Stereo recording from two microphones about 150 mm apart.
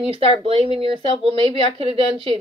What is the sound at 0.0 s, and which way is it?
Speech, 40° right (ahead or behind).